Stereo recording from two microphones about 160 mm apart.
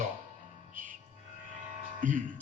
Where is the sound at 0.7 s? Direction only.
55° right (ahead or behind).